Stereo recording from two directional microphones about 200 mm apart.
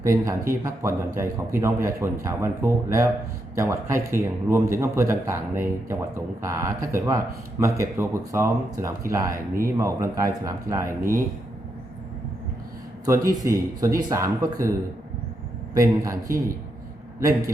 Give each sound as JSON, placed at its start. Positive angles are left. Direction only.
{"t": 0.0, "sound": "a man's voice", "side_deg": -15}
{"t": 13.1, "sound": "a man's voice", "side_deg": -15}
{"t": 15.7, "sound": "a man's voice", "side_deg": -15}